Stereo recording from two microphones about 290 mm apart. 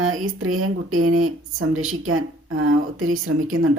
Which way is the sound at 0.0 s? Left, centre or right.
Right.